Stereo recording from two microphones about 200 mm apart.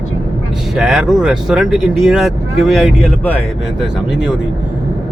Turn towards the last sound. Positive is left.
turn(degrees=5)  # may be behind; listen again after turning